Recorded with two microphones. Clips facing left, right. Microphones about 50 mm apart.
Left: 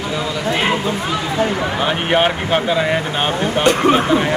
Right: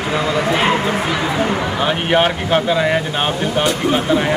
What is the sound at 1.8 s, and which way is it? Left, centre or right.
Speech, centre.